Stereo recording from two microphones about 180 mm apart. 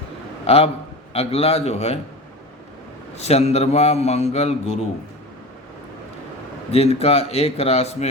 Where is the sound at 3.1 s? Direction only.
35° left (ahead or behind).